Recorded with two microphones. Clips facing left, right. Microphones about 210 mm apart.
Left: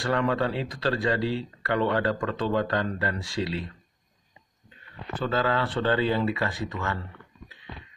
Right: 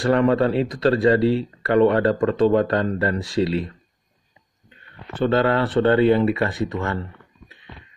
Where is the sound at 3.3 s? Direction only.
65° right (ahead or behind).